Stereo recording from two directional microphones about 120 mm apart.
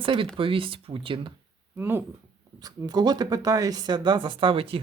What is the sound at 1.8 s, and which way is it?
Speech, 20° right (ahead or behind).